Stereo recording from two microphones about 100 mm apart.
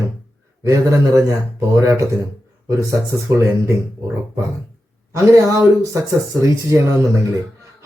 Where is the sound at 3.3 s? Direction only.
25° right (ahead or behind).